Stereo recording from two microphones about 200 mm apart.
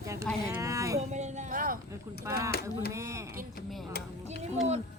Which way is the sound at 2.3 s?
15° right (ahead or behind).